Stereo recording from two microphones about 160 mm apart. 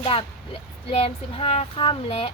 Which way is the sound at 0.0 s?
35° left (ahead or behind).